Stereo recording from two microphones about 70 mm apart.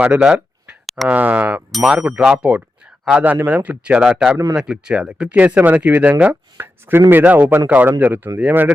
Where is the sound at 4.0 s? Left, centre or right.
Centre.